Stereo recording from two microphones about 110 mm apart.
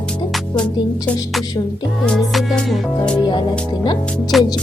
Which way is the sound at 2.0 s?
5° left (ahead or behind).